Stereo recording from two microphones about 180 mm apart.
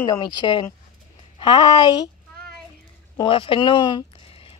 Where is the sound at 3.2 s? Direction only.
30° left (ahead or behind).